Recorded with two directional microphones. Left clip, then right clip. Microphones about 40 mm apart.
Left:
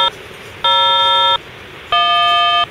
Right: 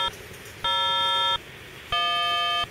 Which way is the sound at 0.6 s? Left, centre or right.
Left.